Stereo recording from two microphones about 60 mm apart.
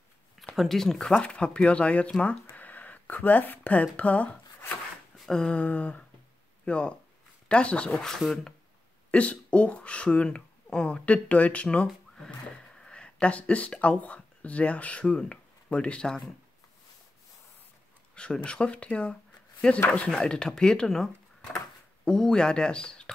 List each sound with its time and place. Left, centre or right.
0.6 s speech: centre; by 4.3 s left
5.3 s speech: centre
8.1 s speech: centre
9.1 s speech: left
18.1 s speech: centre